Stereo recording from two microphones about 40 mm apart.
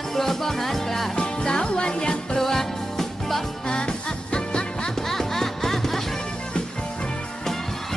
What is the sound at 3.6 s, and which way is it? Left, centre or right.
Music, left.